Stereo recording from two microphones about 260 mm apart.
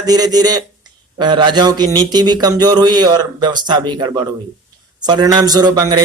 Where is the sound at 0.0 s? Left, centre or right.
Centre.